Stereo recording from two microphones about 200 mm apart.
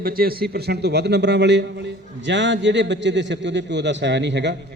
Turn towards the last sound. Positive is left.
turn(degrees=-60)  # may be behind; listen again after turning